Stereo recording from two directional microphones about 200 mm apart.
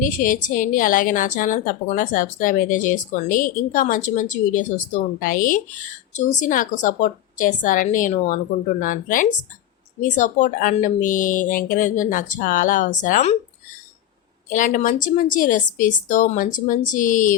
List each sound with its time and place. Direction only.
0.0 s a woman's voice: 40° left (ahead or behind)
14.5 s a woman's voice: 40° left (ahead or behind)